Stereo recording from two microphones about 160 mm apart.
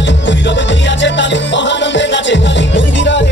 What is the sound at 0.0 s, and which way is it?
Music, 90° left.